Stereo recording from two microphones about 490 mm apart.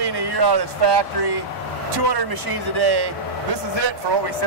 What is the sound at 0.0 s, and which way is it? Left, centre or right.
Speech, right.